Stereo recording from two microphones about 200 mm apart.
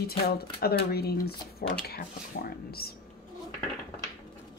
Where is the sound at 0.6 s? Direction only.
50° left (ahead or behind).